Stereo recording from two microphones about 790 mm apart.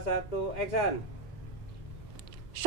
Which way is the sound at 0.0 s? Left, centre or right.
Left.